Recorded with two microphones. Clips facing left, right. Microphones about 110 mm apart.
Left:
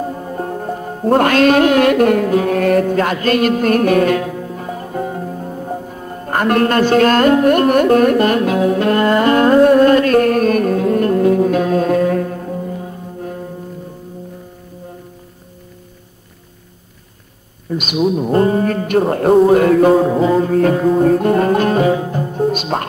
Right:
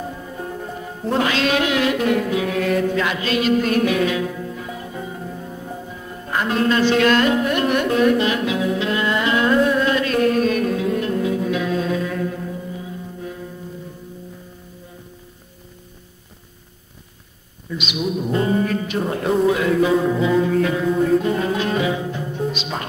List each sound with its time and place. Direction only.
0.0 s music: 50° left (ahead or behind)
17.6 s music: 45° left (ahead or behind)